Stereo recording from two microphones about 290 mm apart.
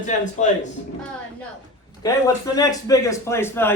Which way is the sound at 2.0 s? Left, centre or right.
Centre.